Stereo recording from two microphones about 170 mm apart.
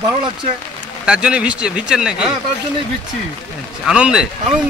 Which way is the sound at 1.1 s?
5° right (ahead or behind).